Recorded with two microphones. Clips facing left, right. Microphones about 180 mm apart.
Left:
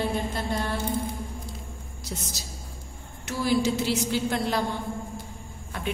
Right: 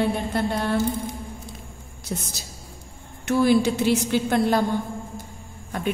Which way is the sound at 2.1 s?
55° right (ahead or behind).